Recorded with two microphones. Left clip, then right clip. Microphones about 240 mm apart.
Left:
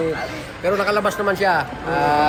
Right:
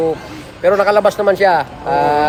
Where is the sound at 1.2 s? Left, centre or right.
Right.